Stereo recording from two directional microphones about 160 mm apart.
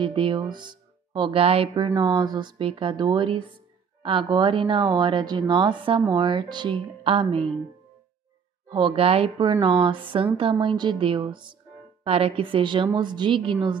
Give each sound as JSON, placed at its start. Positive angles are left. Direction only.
{"t": 0.0, "sound": "speech", "side_deg": -35}
{"t": 8.6, "sound": "speech", "side_deg": -30}